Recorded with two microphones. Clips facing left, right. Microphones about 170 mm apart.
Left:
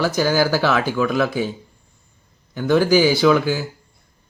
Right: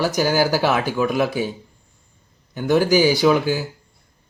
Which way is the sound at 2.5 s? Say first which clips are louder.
Left 1 dB; 15° right (ahead or behind).